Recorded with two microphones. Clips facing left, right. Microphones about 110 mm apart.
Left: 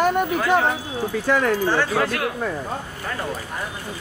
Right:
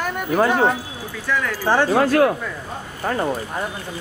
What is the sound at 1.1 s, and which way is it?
Speech, 45° left (ahead or behind).